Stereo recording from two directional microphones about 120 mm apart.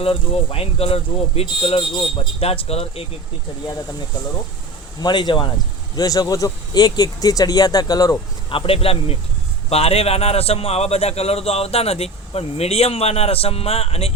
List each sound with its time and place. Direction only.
0.0 s speech: 50° left (ahead or behind)
4.9 s speech: 35° left (ahead or behind)
8.4 s a man's voice: 50° left (ahead or behind)